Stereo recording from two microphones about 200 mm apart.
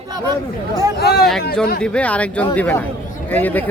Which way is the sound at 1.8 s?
5° left (ahead or behind).